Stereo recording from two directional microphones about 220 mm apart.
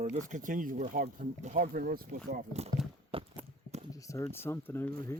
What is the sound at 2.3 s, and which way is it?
Speech, 30° right (ahead or behind).